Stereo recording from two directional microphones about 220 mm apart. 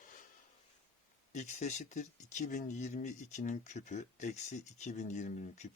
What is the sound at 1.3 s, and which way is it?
Speech, 30° left (ahead or behind).